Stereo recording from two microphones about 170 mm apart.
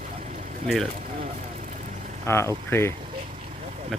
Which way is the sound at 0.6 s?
Centre (ahead or behind).